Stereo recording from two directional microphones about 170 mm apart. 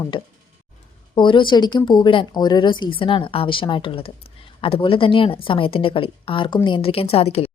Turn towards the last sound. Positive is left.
turn(degrees=35)  # may be behind; listen again after turning